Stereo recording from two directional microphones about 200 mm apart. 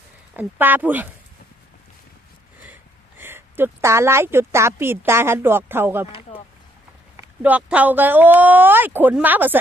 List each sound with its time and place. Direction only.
0.3 s a woman's voice: 10° right (ahead or behind)
3.2 s a woman's voice: 10° right (ahead or behind)
6.1 s a sound: 25° left (ahead or behind)
7.4 s a woman's voice: 5° right (ahead or behind)